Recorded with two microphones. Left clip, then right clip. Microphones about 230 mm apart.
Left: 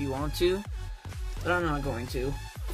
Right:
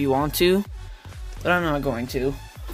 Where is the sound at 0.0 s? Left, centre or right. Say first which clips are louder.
Right 8 dB; right.